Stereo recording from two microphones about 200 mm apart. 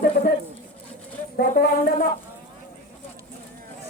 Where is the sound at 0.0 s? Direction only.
45° left (ahead or behind).